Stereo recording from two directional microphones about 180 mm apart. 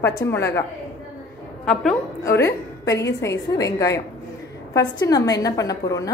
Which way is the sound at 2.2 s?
15° left (ahead or behind).